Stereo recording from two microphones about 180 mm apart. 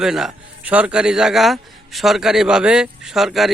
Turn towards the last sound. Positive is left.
turn(degrees=0)  # may be behind; listen again after turning